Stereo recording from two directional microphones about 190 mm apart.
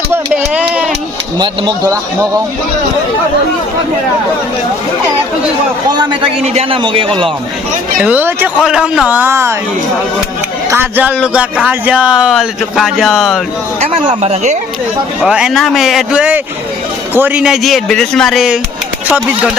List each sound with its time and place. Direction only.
0.1 s a sound: 5° right (ahead or behind)
1.4 s a man's voice: 25° right (ahead or behind)
6.4 s a man's voice: 35° right (ahead or behind)
8.0 s speech: 10° right (ahead or behind)
10.7 s speech: 10° right (ahead or behind)
13.8 s speech: 30° right (ahead or behind)
15.2 s speech: 5° right (ahead or behind)